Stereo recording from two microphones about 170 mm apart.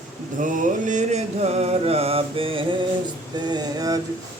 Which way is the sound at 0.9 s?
45° right (ahead or behind).